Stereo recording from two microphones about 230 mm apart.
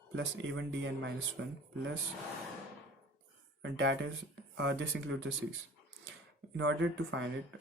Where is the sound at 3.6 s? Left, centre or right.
Right.